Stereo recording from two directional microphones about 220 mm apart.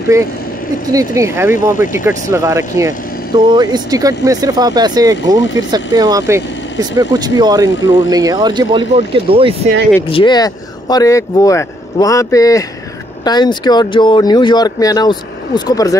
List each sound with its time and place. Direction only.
0.1 s speech: 15° right (ahead or behind)
10.0 s speech: 20° left (ahead or behind)